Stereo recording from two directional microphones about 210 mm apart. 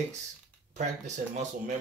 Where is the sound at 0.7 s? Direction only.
35° right (ahead or behind).